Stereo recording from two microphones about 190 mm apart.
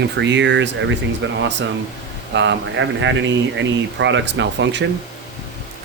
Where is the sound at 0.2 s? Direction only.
70° right (ahead or behind).